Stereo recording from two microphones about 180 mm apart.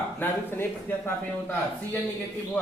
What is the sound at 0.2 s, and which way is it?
Speech, 10° left (ahead or behind).